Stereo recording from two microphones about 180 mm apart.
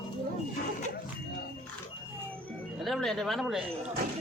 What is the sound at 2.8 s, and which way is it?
Speech, centre (ahead or behind).